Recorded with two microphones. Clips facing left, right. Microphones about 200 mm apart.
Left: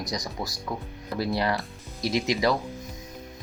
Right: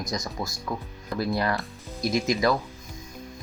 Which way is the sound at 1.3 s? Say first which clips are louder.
Even; 15° left (ahead or behind).